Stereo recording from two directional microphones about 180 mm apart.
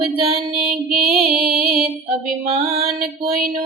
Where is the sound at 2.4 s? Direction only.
35° right (ahead or behind).